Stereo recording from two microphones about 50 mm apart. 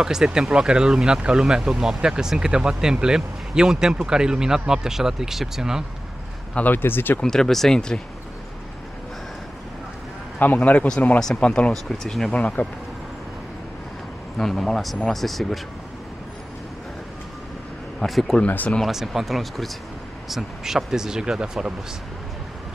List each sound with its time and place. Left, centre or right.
0.0 s speech: centre
6.5 s a man's voice: left
6.8 s speech: left
7.2 s speech: centre
10.4 s a man's voice: left
11.3 s speech: left
11.7 s speech: centre
12.3 s speech: left
14.4 s speech: centre
18.0 s speech: centre